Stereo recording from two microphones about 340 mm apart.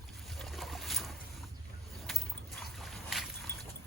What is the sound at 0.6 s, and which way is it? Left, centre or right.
Boat, centre.